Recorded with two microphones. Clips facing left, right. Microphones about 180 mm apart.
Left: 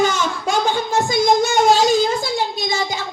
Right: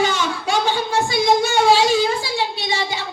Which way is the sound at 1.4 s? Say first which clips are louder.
Left 1 dB; 45° left (ahead or behind).